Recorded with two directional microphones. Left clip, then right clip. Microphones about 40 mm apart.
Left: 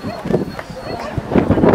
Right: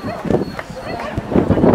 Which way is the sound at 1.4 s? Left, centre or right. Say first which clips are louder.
Even; centre.